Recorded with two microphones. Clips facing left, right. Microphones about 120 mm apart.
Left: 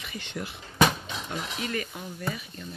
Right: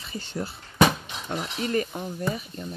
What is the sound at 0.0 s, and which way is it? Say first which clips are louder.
Speech: right 3 dB; 35° right (ahead or behind).